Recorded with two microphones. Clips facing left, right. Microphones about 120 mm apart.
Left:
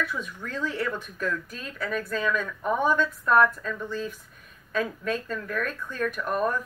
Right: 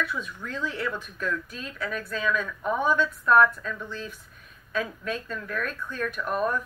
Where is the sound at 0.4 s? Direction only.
45° left (ahead or behind).